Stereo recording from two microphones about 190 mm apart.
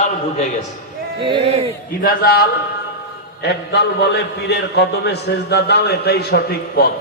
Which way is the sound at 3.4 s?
60° left (ahead or behind).